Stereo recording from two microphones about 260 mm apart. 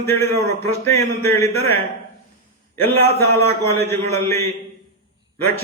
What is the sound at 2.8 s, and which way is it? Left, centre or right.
A man's voice, centre.